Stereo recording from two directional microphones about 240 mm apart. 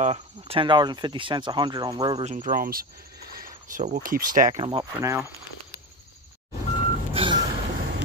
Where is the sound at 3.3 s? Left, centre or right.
Right.